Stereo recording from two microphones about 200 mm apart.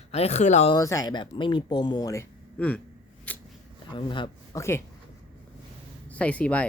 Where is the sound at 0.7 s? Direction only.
15° left (ahead or behind).